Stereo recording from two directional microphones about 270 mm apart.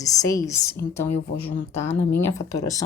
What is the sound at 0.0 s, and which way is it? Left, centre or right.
Speech, centre.